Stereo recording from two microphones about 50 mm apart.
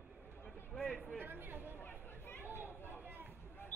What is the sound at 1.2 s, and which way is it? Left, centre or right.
Chatter, right.